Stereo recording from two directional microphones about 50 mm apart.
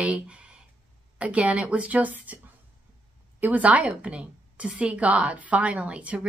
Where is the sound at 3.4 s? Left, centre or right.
Right.